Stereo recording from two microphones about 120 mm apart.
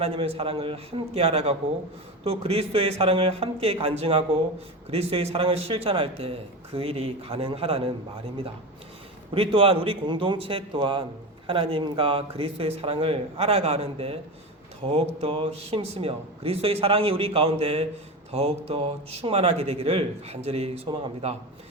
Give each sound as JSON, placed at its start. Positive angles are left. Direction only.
{"t": 0.0, "sound": "speech", "side_deg": -55}
{"t": 9.3, "sound": "speech", "side_deg": -50}